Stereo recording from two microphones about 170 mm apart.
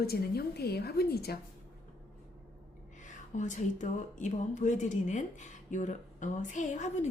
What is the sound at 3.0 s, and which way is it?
Speech, 45° left (ahead or behind).